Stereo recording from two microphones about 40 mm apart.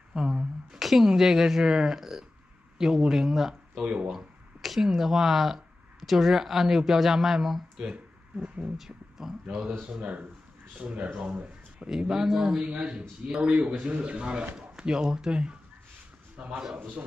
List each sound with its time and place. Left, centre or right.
0.1 s a sound: centre
0.7 s speech: centre
3.8 s speech: right
4.1 s a sound: centre
4.8 s speech: centre; by 11.9 s right
12.1 s speech: centre
12.6 s speech: right